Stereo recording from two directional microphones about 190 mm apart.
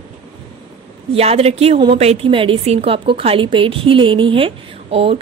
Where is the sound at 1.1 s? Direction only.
30° right (ahead or behind).